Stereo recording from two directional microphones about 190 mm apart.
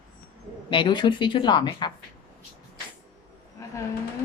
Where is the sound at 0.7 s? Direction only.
25° left (ahead or behind).